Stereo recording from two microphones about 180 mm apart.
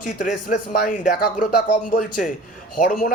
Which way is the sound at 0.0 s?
45° left (ahead or behind).